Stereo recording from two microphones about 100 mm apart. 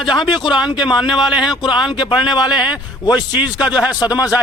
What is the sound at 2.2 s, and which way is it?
Speech, 45° left (ahead or behind).